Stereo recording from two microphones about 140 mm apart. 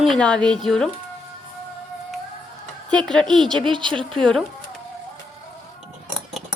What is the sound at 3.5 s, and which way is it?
Speech, 35° right (ahead or behind).